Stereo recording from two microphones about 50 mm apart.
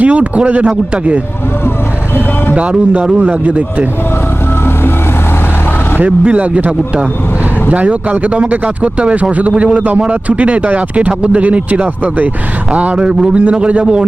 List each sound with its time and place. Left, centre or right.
0.0 s a man's voice: right
2.6 s a man's voice: right
6.1 s a man's voice: right